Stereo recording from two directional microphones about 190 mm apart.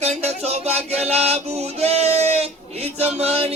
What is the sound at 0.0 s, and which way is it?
Music, 35° right (ahead or behind).